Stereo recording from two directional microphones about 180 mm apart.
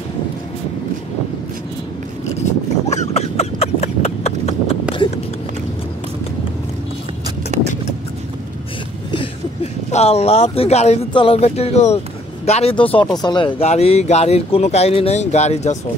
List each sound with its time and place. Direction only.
2.3 s a sound: 40° left (ahead or behind)
7.5 s vehicle: 40° right (ahead or behind)
9.9 s speech: 35° left (ahead or behind)